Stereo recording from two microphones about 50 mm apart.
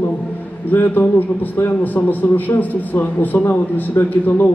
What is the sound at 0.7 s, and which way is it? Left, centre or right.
A man's voice, left.